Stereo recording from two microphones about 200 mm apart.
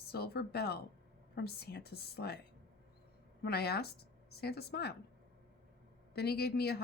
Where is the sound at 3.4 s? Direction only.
55° left (ahead or behind).